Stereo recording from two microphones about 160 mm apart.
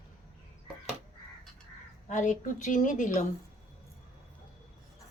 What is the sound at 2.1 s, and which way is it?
Speech, 50° left (ahead or behind).